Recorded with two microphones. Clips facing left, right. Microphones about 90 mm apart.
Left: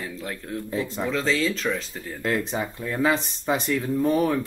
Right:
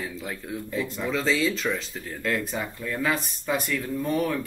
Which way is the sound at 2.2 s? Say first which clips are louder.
Left 3 dB; 30° left (ahead or behind).